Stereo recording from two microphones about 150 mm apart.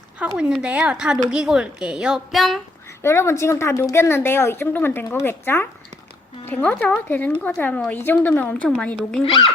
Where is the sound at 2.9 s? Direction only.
15° left (ahead or behind).